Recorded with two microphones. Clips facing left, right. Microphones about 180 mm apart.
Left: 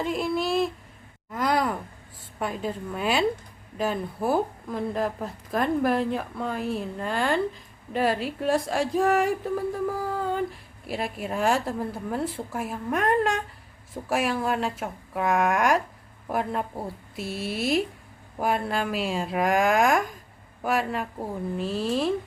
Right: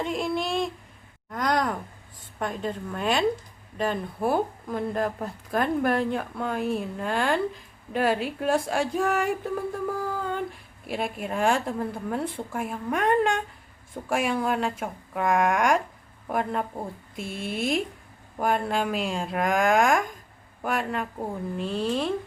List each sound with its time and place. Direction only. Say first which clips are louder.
0.0 s a sound: left 1 dB; centre (ahead or behind)
1.3 s sigh: left 1 dB; 5° left (ahead or behind)
2.4 s speech: even; 5° left (ahead or behind)